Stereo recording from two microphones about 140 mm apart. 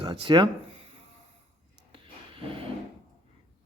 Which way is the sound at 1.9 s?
40° right (ahead or behind).